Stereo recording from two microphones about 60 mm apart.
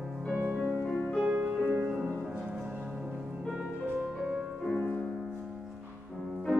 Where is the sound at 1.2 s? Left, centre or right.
Right.